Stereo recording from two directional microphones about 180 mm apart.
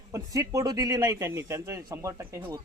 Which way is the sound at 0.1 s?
20° right (ahead or behind).